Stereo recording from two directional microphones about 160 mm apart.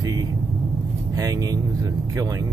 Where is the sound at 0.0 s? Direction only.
25° right (ahead or behind).